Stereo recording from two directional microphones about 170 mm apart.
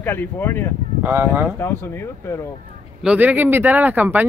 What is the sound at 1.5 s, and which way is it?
Speech, 15° left (ahead or behind).